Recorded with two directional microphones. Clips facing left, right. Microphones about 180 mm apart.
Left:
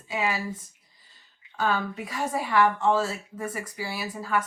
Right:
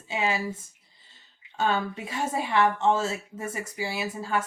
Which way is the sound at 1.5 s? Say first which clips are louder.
Right 1 dB; 25° right (ahead or behind).